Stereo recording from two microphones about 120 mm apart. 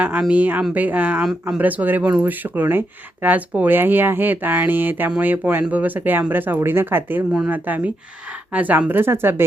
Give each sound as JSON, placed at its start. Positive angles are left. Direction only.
{"t": 0.0, "sound": "speech", "side_deg": -10}